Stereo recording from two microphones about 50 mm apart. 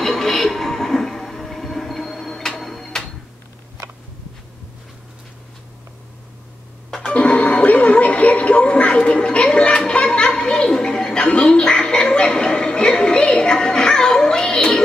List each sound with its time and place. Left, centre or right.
0.0 s television: centre
7.1 s television: left